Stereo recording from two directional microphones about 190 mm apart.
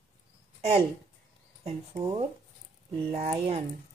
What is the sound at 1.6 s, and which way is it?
Speech, 30° right (ahead or behind).